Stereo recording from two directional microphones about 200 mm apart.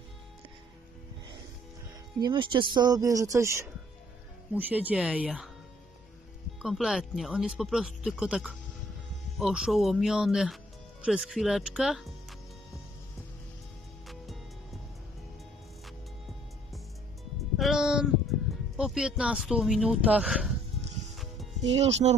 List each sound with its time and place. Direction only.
2.1 s speech: 20° right (ahead or behind); by 5.5 s 5° right (ahead or behind)
6.6 s speech: centre (ahead or behind)
14.0 s music: centre (ahead or behind)
17.6 s a sound: centre (ahead or behind)
18.8 s speech: 5° right (ahead or behind)
21.1 s music: centre (ahead or behind)
22.0 s speech: 35° right (ahead or behind)